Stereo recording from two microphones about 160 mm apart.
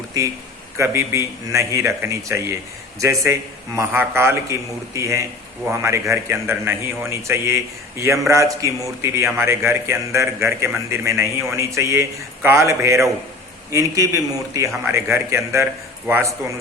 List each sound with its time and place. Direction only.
0.8 s a man's voice: 20° right (ahead or behind)